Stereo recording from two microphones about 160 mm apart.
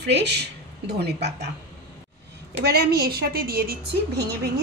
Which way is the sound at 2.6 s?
85° right.